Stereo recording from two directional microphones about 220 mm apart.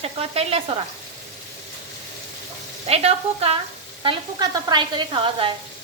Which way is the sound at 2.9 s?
25° right (ahead or behind).